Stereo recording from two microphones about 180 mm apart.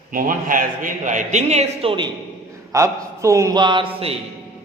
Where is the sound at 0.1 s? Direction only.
50° right (ahead or behind); by 2.0 s 30° right (ahead or behind).